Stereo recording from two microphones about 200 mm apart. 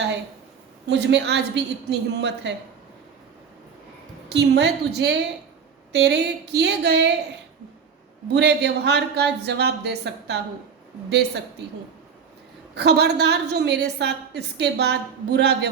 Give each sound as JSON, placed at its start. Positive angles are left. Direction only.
{"t": 0.9, "sound": "a woman's voice", "side_deg": -60}
{"t": 4.3, "sound": "a woman's voice", "side_deg": -55}
{"t": 8.3, "sound": "a woman's voice", "side_deg": -55}
{"t": 12.7, "sound": "a woman's voice", "side_deg": -55}